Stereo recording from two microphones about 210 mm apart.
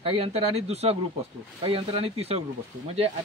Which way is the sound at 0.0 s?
30° right (ahead or behind).